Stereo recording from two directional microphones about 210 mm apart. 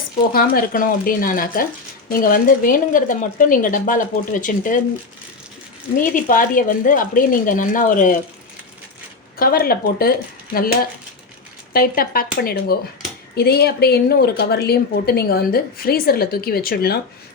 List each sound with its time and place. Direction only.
0.3 s a woman's voice: 45° left (ahead or behind)
6.0 s speech: 40° left (ahead or behind)
9.4 s a woman's voice: 45° left (ahead or behind)
11.7 s a woman's voice: 45° left (ahead or behind)